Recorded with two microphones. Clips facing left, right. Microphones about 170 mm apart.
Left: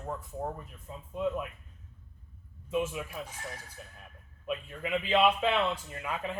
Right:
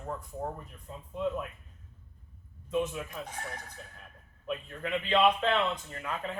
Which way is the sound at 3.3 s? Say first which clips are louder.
Right 2 dB; 55° right (ahead or behind).